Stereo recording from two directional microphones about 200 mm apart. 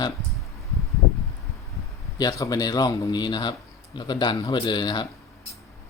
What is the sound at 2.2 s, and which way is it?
A man's voice, 15° left (ahead or behind).